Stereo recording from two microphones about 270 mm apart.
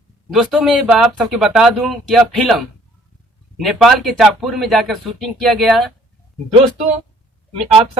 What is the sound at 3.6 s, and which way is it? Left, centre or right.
Speech, centre.